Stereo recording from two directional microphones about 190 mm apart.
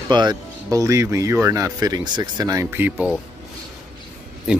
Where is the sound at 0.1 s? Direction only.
20° right (ahead or behind).